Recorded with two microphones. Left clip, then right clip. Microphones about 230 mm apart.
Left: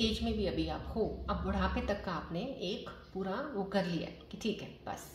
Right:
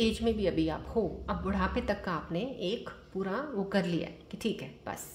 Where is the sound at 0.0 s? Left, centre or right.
Right.